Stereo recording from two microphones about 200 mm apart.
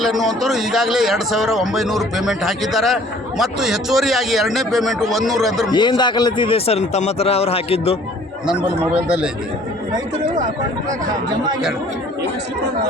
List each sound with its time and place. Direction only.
0.0 s a man's voice: centre (ahead or behind)
5.7 s a man's voice: 20° left (ahead or behind)
8.4 s a man's voice: 5° right (ahead or behind)
10.2 s speech: 40° right (ahead or behind)